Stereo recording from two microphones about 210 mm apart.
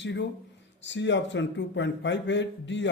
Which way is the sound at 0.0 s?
60° left (ahead or behind).